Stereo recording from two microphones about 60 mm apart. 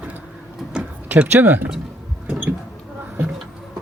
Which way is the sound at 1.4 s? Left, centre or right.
Right.